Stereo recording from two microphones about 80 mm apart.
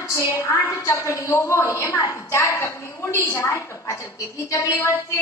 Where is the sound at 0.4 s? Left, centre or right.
Left.